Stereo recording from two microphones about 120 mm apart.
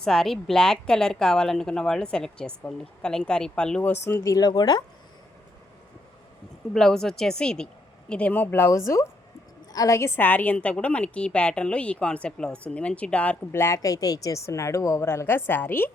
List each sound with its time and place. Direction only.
0.0 s a woman's voice: 5° left (ahead or behind)
4.0 s speech: 25° left (ahead or behind)
6.7 s a woman's voice: 5° left (ahead or behind)
13.6 s a woman's voice: 25° left (ahead or behind)